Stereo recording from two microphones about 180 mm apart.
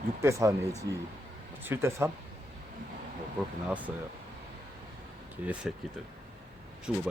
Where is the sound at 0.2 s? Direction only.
15° right (ahead or behind).